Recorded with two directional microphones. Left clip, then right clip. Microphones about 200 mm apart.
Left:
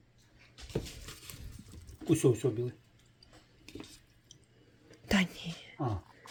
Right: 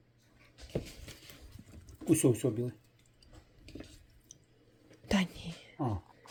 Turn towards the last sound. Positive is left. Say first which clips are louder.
# even
turn(degrees=0)  # may be behind; listen again after turning